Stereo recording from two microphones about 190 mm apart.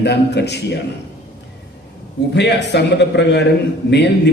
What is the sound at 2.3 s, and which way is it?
A man's voice, 65° left (ahead or behind).